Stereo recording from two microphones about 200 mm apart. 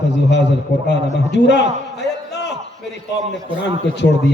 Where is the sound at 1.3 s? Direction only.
60° left (ahead or behind).